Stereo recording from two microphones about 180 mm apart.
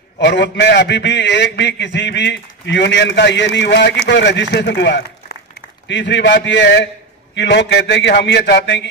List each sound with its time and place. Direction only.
0.2 s a man's voice: 75° left (ahead or behind)